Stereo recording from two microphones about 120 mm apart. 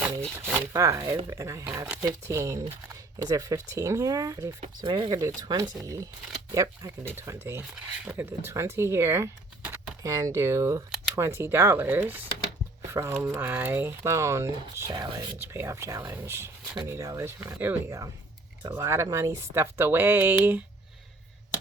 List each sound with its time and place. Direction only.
0.3 s speech: 15° right (ahead or behind)
4.8 s speech: 40° right (ahead or behind)
15.4 s speech: 20° right (ahead or behind)